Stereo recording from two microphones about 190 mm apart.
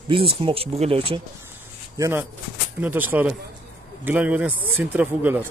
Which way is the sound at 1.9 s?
15° right (ahead or behind).